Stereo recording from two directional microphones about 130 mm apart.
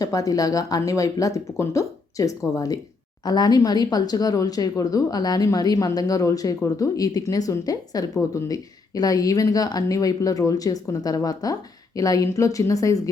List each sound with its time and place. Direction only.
0.0 s speech: 25° left (ahead or behind)